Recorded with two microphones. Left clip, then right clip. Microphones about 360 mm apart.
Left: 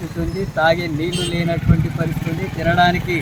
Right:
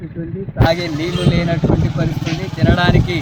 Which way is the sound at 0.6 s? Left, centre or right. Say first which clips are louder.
Right 2 dB; centre.